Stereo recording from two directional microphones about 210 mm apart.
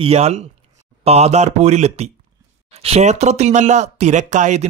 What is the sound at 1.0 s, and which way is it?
Speech, 30° right (ahead or behind).